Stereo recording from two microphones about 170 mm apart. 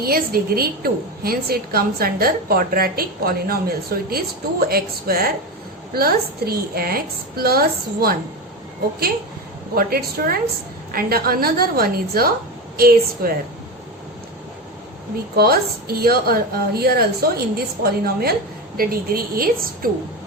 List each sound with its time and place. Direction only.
0.0 s a woman's voice: 60° right (ahead or behind)
9.7 s a woman's voice: 60° right (ahead or behind)
15.4 s a woman's voice: 65° right (ahead or behind)